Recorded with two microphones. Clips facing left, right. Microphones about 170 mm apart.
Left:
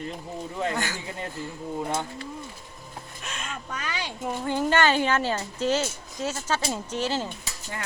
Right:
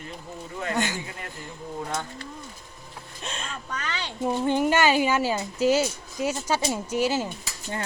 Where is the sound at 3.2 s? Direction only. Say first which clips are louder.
Right 1 dB; 30° right (ahead or behind).